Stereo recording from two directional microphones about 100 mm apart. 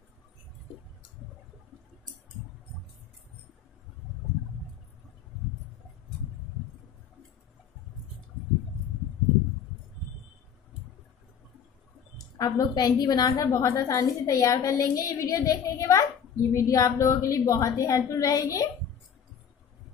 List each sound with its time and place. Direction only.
12.4 s a woman's voice: 40° left (ahead or behind)